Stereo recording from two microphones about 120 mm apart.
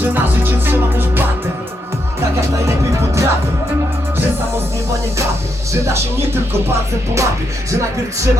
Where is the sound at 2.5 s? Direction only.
25° right (ahead or behind).